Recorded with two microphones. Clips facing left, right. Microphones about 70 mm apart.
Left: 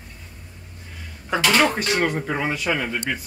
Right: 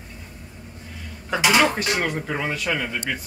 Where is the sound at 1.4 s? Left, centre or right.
Centre.